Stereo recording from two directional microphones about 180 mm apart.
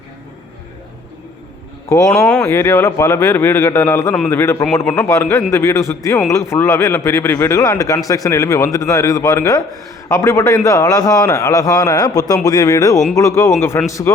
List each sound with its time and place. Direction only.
1.9 s a man's voice: 15° left (ahead or behind)